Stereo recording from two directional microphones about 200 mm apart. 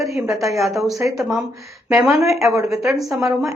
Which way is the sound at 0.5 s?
Centre (ahead or behind).